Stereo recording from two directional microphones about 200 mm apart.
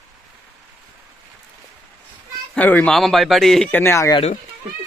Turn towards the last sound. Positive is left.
turn(degrees=15)  # may be behind; listen again after turning